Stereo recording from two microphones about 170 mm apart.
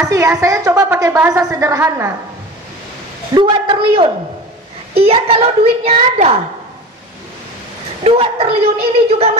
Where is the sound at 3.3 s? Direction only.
30° right (ahead or behind).